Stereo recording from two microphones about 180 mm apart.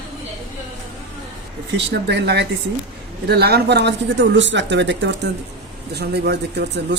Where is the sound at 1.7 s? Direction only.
70° right (ahead or behind).